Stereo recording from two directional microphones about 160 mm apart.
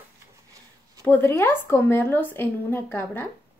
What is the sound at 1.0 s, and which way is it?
A woman's voice, 10° left (ahead or behind).